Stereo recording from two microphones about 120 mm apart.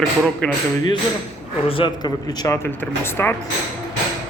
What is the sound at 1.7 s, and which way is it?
Speech, 45° left (ahead or behind).